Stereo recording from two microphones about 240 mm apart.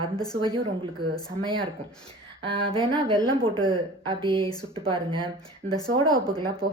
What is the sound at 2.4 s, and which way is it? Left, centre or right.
A woman's voice, right.